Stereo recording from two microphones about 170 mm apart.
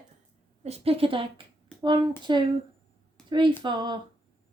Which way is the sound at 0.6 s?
35° right (ahead or behind).